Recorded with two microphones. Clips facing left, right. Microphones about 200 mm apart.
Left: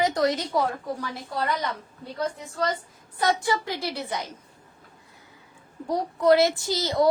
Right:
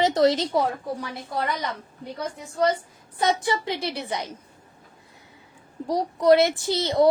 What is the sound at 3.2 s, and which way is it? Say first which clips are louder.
A woman's voice: right 1 dB; 20° right (ahead or behind).